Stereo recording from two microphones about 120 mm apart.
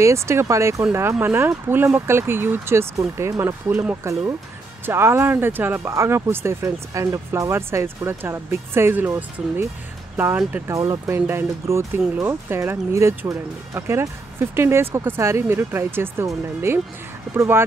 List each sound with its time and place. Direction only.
0.0 s speech: 25° right (ahead or behind)
10.7 s speech: 25° right (ahead or behind)